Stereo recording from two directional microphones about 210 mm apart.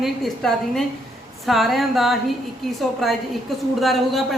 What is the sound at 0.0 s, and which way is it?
Speech, centre (ahead or behind).